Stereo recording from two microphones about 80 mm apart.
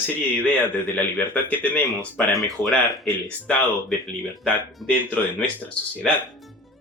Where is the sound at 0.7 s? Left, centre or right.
Centre.